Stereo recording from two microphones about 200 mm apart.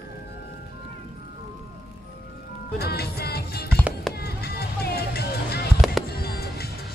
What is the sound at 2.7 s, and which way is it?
Music, 50° left (ahead or behind).